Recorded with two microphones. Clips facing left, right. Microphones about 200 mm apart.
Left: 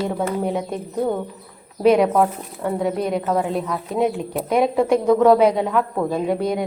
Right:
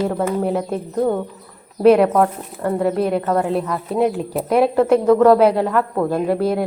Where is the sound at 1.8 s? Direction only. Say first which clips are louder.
Right 3 dB; centre (ahead or behind).